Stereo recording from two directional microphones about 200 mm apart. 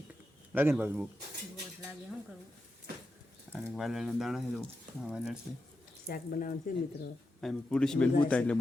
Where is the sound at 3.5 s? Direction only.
Centre (ahead or behind).